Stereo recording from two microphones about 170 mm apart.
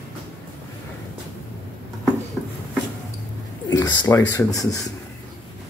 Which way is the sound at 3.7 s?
25° left (ahead or behind).